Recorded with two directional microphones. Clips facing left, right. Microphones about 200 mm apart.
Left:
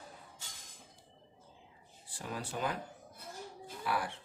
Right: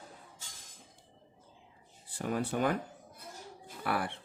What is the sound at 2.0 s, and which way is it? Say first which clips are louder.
Speech: right 8 dB; 60° right (ahead or behind).